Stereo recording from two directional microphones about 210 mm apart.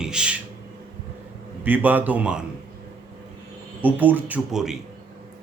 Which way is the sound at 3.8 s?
10° right (ahead or behind).